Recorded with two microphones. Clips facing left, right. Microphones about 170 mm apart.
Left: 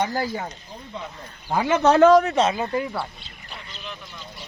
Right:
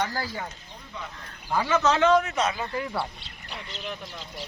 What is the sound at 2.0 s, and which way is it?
Speech, 40° left (ahead or behind).